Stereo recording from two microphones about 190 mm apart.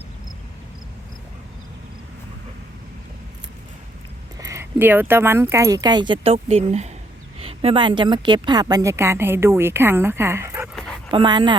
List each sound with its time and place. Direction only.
4.4 s a woman's voice: 15° right (ahead or behind)
11.1 s speech: 25° right (ahead or behind)